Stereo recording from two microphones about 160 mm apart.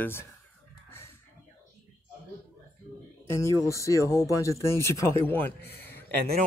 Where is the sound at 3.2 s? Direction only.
20° left (ahead or behind).